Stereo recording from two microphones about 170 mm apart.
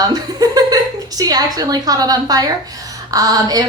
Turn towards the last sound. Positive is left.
turn(degrees=-20)  # may be behind; listen again after turning